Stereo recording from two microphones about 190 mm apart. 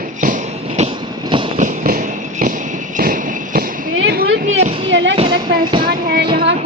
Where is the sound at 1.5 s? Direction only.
45° right (ahead or behind).